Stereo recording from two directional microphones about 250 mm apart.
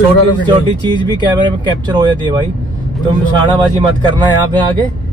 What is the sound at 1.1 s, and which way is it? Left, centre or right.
Speech, centre.